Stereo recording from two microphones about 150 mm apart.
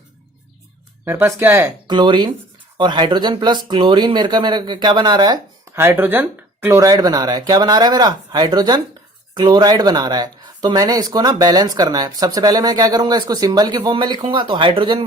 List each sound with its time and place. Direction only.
1.0 s speech: 15° right (ahead or behind)
1.9 s speech: 30° right (ahead or behind)
5.8 s speech: 15° right (ahead or behind); by 15.0 s 35° right (ahead or behind)